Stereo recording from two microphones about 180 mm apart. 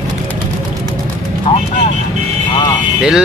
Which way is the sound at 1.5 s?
30° left (ahead or behind).